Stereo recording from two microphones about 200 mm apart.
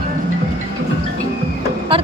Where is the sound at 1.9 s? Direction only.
25° right (ahead or behind).